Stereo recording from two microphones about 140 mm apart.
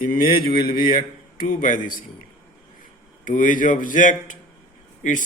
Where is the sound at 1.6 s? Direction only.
65° left (ahead or behind).